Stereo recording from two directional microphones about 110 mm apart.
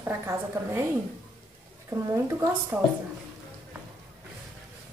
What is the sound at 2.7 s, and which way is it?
Speech, 15° right (ahead or behind).